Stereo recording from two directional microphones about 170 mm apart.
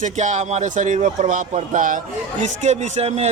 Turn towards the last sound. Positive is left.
turn(degrees=-40)  # may be behind; listen again after turning